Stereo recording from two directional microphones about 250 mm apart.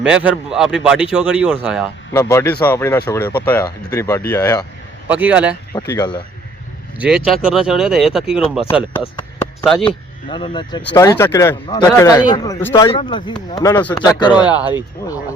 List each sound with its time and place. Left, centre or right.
0.0 s speech: centre
2.1 s a man's voice: centre
5.0 s speech: centre
5.9 s a man's voice: centre
7.3 s speech: centre
9.8 s a man's voice: centre
14.5 s speech: centre